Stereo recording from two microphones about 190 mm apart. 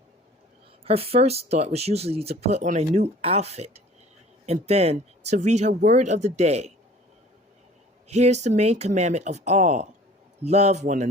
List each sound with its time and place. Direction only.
0.9 s speech: 30° right (ahead or behind)
8.0 s speech: 35° right (ahead or behind)